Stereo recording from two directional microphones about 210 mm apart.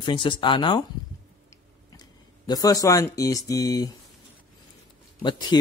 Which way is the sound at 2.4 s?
15° left (ahead or behind).